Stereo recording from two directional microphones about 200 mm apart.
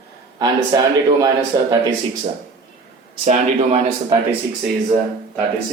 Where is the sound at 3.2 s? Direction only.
35° right (ahead or behind).